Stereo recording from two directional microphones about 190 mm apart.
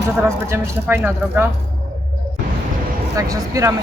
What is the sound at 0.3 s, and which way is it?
Speech, 15° right (ahead or behind).